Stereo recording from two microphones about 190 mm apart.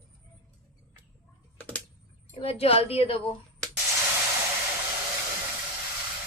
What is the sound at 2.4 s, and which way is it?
Speech, 30° left (ahead or behind).